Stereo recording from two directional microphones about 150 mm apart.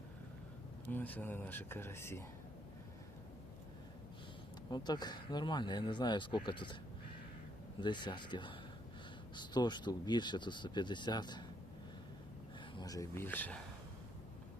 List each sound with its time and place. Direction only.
0.9 s speech: 10° left (ahead or behind)
4.7 s speech: 30° left (ahead or behind)
7.8 s speech: 30° left (ahead or behind)
12.7 s speech: 25° left (ahead or behind)